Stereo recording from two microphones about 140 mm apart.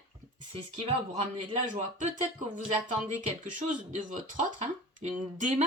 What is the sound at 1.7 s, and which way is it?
Speech, 65° right (ahead or behind).